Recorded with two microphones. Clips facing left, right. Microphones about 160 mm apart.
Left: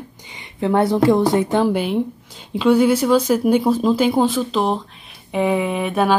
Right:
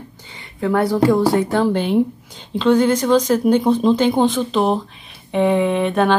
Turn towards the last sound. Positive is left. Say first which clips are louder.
# right 3 dB
turn(degrees=5)  # may be behind; listen again after turning